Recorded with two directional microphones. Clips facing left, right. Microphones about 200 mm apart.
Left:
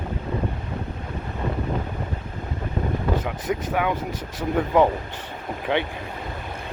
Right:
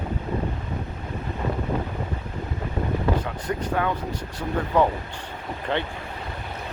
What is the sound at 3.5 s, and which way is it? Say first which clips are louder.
Speech: left 2 dB; 10° left (ahead or behind).